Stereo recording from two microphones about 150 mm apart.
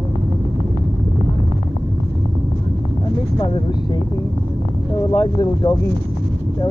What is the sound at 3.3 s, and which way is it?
Vehicle, 30° left (ahead or behind).